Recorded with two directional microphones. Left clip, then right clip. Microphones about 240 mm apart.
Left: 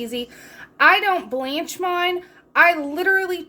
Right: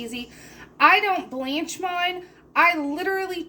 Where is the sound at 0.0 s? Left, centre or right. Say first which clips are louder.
Left 6 dB; left.